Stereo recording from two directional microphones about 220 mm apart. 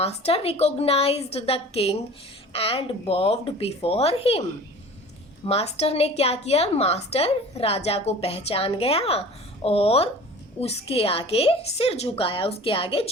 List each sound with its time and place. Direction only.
0.0 s a woman's voice: 25° left (ahead or behind)
5.5 s a woman's voice: 25° left (ahead or behind)